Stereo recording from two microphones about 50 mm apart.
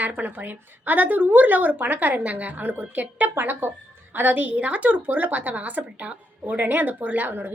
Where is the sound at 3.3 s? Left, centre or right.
Right.